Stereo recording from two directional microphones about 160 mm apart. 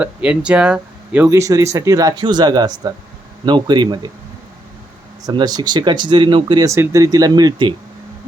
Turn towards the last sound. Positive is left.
turn(degrees=-25)  # may be behind; listen again after turning